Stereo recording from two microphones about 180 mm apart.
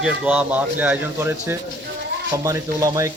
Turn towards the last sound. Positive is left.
turn(degrees=-20)  # may be behind; listen again after turning